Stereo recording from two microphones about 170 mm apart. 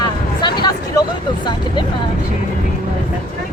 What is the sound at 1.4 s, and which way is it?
Speech, 25° left (ahead or behind).